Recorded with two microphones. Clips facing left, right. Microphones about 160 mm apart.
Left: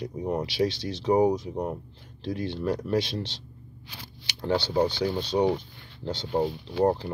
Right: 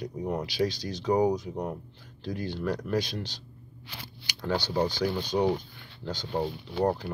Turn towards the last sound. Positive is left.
turn(degrees=25)  # may be behind; listen again after turning